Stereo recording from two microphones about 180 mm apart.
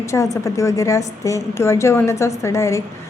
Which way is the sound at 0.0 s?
15° left (ahead or behind).